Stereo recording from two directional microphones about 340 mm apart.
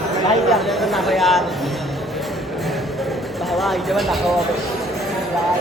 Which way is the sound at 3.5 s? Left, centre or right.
Centre.